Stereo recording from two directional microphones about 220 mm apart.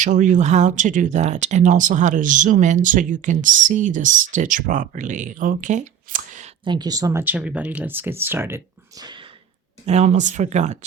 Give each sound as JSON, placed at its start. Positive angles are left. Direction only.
{"t": 0.0, "sound": "speech", "side_deg": -35}
{"t": 6.7, "sound": "speech", "side_deg": -20}
{"t": 9.8, "sound": "speech", "side_deg": -30}